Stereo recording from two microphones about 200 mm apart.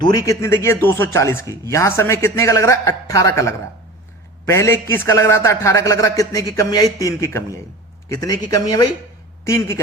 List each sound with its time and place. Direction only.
0.0 s a man's voice: 20° left (ahead or behind)